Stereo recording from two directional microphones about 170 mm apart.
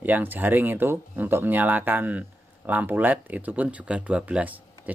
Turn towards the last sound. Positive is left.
turn(degrees=-10)  # may be behind; listen again after turning